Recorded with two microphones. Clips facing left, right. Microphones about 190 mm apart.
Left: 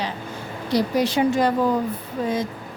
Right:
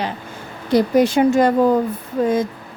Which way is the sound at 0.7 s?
50° right (ahead or behind).